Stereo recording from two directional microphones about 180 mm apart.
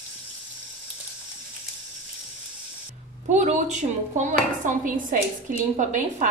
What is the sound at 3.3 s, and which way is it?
Dishes, 40° right (ahead or behind).